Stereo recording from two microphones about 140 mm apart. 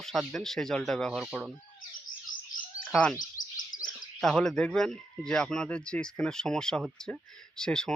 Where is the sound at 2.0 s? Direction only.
75° left (ahead or behind).